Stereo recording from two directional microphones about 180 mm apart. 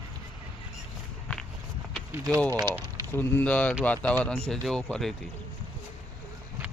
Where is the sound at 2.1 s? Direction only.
15° right (ahead or behind).